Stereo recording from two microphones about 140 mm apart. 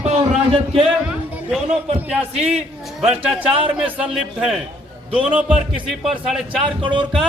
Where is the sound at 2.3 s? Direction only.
50° right (ahead or behind).